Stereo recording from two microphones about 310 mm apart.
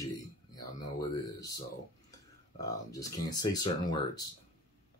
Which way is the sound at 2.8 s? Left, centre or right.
Centre.